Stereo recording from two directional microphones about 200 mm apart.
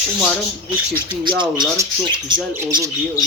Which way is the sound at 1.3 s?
25° right (ahead or behind).